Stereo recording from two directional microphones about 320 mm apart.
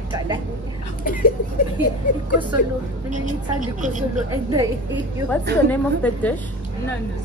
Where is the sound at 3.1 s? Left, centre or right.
Right.